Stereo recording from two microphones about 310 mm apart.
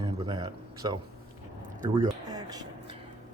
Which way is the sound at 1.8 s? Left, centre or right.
Right.